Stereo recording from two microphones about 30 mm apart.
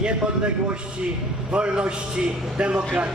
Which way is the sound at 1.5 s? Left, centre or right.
Right.